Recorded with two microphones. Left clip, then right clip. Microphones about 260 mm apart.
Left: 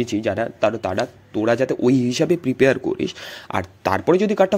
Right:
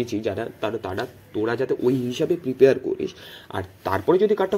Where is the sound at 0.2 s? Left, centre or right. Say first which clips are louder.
Left 7 dB; left.